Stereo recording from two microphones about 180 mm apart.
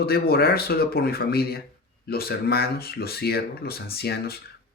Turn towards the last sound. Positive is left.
turn(degrees=60)  # may be behind; listen again after turning